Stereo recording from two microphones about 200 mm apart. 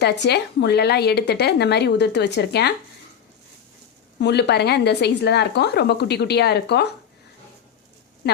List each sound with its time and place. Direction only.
0.0 s speech: 55° left (ahead or behind)
4.2 s speech: 55° left (ahead or behind)